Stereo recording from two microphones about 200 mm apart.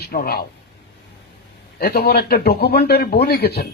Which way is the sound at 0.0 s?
50° left (ahead or behind).